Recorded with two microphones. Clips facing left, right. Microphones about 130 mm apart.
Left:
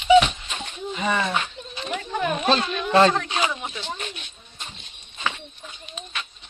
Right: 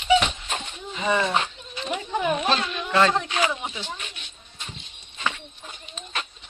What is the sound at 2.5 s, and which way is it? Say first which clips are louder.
Speech: left 3 dB; 30° left (ahead or behind).